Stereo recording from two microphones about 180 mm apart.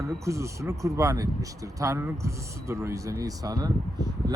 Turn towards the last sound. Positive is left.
turn(degrees=-20)  # may be behind; listen again after turning